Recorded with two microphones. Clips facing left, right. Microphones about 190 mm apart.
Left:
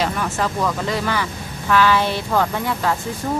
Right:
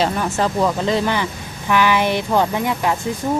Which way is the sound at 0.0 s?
30° right (ahead or behind).